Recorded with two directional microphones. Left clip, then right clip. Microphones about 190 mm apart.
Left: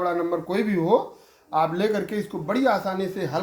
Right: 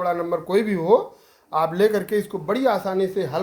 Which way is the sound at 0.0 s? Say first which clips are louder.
Right 1 dB; 45° right (ahead or behind).